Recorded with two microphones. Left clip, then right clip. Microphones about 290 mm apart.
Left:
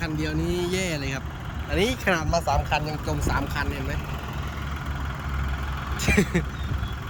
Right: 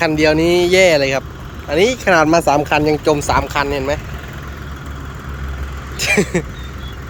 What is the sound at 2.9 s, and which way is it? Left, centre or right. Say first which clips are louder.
Speech: right 14 dB; right.